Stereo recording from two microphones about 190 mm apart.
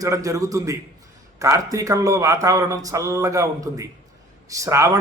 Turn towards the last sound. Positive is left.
turn(degrees=-15)  # may be behind; listen again after turning